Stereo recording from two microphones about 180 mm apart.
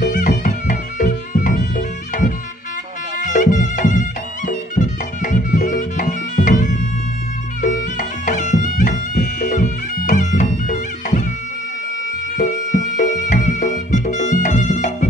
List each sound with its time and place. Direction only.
0.0 s music: 50° left (ahead or behind)
12.8 s music: 45° left (ahead or behind)